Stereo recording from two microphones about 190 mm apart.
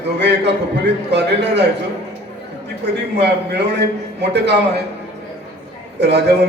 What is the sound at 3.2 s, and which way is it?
A man's voice, 60° right (ahead or behind).